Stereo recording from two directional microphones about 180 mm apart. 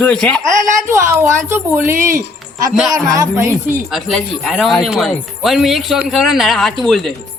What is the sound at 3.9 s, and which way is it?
Speech, centre (ahead or behind).